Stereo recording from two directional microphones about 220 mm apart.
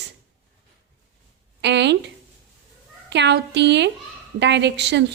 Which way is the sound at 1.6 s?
50° right (ahead or behind).